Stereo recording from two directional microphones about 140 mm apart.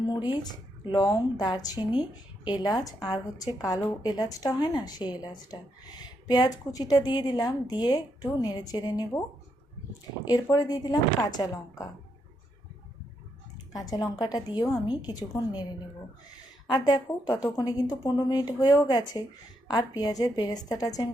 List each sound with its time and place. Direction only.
0.1 s a sound: 30° left (ahead or behind)
0.9 s a woman's voice: 30° left (ahead or behind)
10.5 s a woman's voice: 30° left (ahead or behind)
13.7 s a woman's voice: 25° left (ahead or behind)
16.6 s a woman's voice: 30° left (ahead or behind)